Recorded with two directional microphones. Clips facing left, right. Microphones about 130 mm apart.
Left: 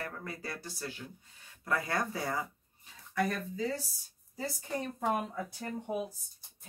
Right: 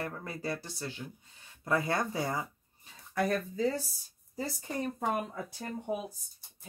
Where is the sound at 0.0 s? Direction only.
25° right (ahead or behind).